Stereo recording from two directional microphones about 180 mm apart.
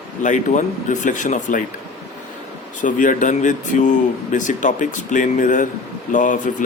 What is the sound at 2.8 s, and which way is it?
Speech, 45° left (ahead or behind).